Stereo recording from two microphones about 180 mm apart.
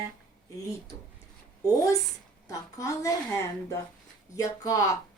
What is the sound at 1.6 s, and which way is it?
A woman's voice, 20° left (ahead or behind).